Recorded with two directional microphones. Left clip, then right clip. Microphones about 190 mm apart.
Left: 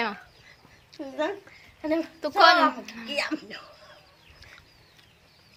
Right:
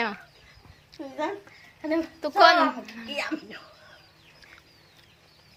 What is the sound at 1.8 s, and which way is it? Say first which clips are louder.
Speech: even; 40° left (ahead or behind).